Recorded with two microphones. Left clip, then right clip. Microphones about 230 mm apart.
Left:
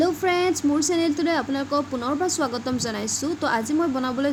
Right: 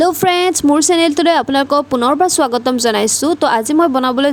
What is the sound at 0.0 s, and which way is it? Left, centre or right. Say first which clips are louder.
Speech: right 9 dB; right.